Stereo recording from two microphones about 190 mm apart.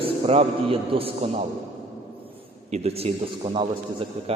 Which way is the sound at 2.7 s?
35° right (ahead or behind).